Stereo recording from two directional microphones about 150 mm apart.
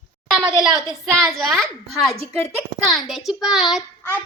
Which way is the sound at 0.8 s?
25° right (ahead or behind).